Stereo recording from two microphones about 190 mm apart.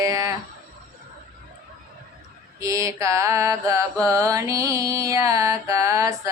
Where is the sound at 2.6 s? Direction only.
15° right (ahead or behind).